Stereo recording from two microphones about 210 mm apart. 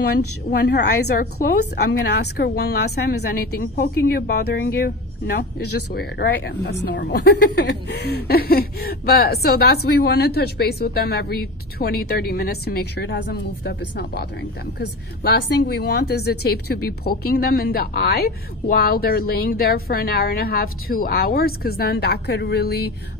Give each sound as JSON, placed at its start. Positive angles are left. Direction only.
{"t": 0.5, "sound": "a woman's voice", "side_deg": 50}
{"t": 15.6, "sound": "a woman's voice", "side_deg": 50}